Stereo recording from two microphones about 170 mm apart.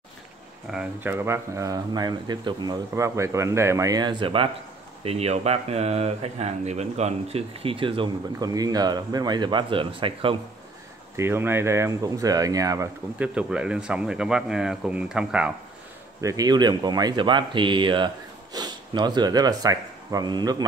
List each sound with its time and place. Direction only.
0.7 s speech: 10° right (ahead or behind); by 10.3 s 30° right (ahead or behind)
11.1 s speech: 15° right (ahead or behind)
16.2 s speech: 20° right (ahead or behind)